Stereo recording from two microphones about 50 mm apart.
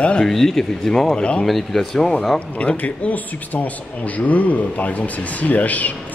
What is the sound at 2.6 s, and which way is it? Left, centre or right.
A man's voice, left.